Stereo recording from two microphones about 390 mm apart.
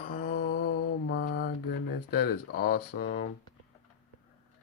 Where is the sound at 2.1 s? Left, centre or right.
Left.